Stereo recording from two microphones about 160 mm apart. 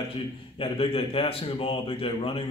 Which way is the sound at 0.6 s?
35° left (ahead or behind).